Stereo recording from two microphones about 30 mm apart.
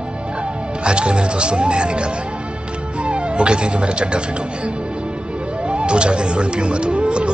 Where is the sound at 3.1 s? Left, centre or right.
Right.